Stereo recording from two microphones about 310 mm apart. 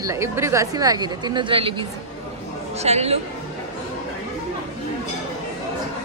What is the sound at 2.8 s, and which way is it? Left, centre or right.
Speech, centre.